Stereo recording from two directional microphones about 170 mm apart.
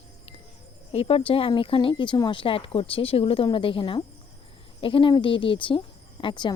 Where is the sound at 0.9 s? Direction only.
35° left (ahead or behind).